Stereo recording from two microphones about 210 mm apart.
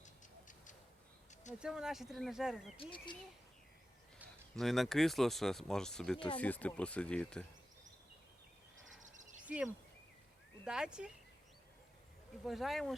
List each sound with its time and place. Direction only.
0.0 s tick-tock: 35° left (ahead or behind)
1.5 s speech: 5° right (ahead or behind)
2.7 s speech: 25° left (ahead or behind)
4.2 s speech: centre (ahead or behind)
9.0 s a sound: 35° right (ahead or behind)
9.4 s a sound: 5° right (ahead or behind)
10.6 s speech: 5° right (ahead or behind)
12.5 s speech: centre (ahead or behind)